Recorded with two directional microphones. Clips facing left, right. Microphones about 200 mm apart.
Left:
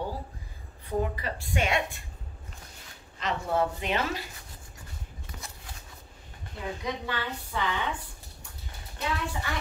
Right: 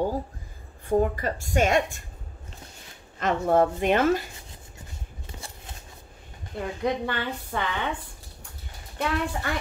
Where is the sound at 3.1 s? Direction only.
50° right (ahead or behind).